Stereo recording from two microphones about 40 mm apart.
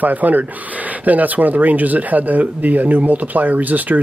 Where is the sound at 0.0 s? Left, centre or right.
Right.